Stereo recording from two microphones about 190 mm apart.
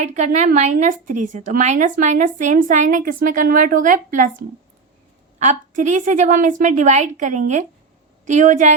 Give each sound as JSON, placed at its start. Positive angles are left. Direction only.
{"t": 0.0, "sound": "a woman's voice", "side_deg": -40}
{"t": 5.4, "sound": "a woman's voice", "side_deg": -40}